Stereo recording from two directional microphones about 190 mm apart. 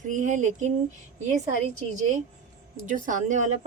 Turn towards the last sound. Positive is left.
turn(degrees=-40)  # may be behind; listen again after turning